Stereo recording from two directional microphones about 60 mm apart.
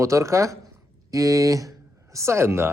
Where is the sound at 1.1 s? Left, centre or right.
Right.